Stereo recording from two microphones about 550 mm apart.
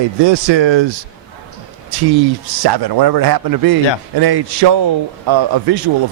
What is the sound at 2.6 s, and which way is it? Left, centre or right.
A man's voice, right.